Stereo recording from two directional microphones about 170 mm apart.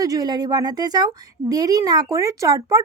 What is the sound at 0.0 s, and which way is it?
Speech, 20° right (ahead or behind).